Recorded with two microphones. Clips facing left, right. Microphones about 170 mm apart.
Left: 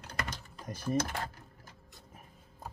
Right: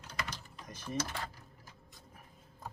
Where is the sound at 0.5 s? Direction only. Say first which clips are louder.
Left 6 dB; 35° left (ahead or behind).